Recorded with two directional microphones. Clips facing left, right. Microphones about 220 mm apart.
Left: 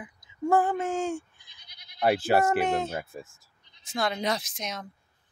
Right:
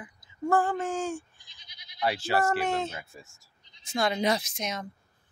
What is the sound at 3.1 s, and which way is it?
Bleat, 55° left (ahead or behind).